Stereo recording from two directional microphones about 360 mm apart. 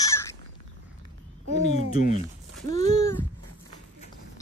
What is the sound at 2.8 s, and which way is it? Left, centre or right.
Speech, centre.